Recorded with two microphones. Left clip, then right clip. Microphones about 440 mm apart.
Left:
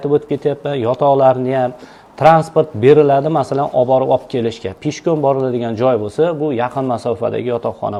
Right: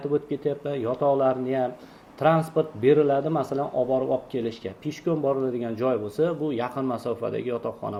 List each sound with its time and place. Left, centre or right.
0.1 s a man's voice: left